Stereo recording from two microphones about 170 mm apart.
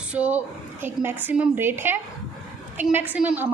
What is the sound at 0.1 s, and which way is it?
A woman's voice, 10° right (ahead or behind).